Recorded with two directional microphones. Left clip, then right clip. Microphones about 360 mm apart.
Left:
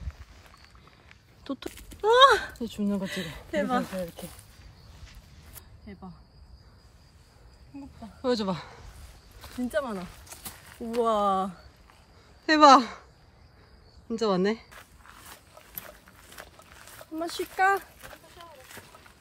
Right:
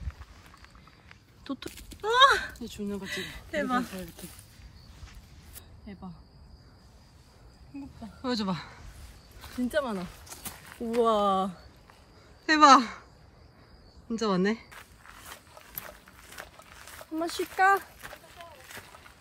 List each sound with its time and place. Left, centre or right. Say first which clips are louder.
1.0 s speech: left 2 dB; centre
2.6 s speech: left 5 dB; left
3.1 s speech: left 1 dB; centre
5.9 s speech: even; centre
8.0 s speech: left 5 dB; centre
14.0 s walk: left 2 dB; centre